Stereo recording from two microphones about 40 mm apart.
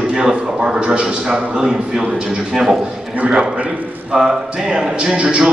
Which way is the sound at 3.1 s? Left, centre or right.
Right.